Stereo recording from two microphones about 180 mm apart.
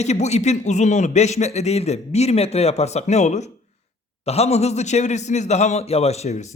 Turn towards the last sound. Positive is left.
turn(degrees=40)  # may be behind; listen again after turning